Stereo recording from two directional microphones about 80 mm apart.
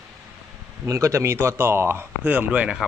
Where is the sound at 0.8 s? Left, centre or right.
Right.